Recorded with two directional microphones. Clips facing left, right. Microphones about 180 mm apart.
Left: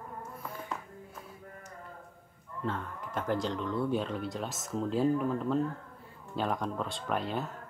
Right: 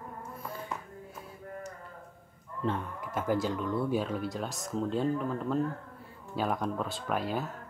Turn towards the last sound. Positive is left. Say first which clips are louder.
# right 1 dB
turn(degrees=-5)  # may be behind; listen again after turning